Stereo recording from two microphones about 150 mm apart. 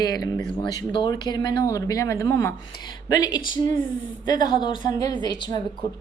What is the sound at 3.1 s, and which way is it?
A woman's voice, 30° left (ahead or behind).